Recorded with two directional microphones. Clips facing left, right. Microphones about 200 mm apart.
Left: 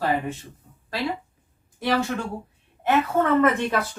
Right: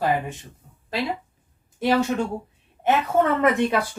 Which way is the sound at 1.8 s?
20° right (ahead or behind).